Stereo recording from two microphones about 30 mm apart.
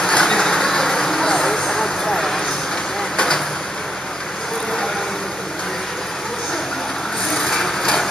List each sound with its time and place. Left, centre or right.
0.0 s vehicle: centre
7.3 s wood: centre